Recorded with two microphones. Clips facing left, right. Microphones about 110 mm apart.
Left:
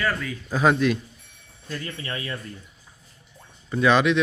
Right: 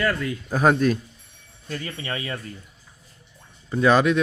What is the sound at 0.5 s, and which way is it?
Speech, 45° right (ahead or behind).